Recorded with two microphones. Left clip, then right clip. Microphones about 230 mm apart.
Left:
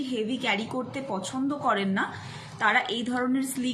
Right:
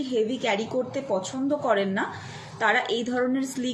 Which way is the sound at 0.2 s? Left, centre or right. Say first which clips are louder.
Right 3 dB; left.